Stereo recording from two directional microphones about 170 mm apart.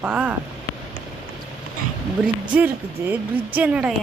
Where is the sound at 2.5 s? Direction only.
10° right (ahead or behind).